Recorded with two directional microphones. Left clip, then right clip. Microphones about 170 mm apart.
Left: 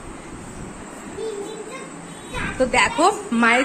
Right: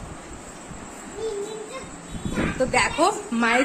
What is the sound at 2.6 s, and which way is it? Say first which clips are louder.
A woman's voice: left 4 dB; centre (ahead or behind).